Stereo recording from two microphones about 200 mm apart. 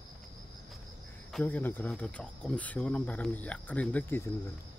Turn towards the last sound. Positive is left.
turn(degrees=10)  # may be behind; listen again after turning